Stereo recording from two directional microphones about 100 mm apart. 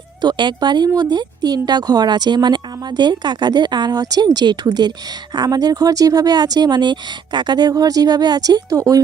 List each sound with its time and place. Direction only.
0.2 s speech: 50° right (ahead or behind)